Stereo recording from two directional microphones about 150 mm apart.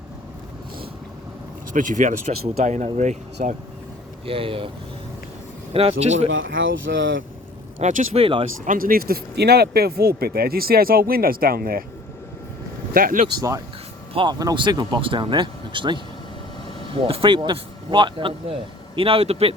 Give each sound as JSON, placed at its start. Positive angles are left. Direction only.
{"t": 1.7, "sound": "speech", "side_deg": -60}
{"t": 4.3, "sound": "speech", "side_deg": -35}
{"t": 5.7, "sound": "speech", "side_deg": -45}
{"t": 6.9, "sound": "speech", "side_deg": -90}
{"t": 7.8, "sound": "speech", "side_deg": -50}
{"t": 8.6, "sound": "speech", "side_deg": -65}
{"t": 12.9, "sound": "speech", "side_deg": -70}
{"t": 14.1, "sound": "speech", "side_deg": -35}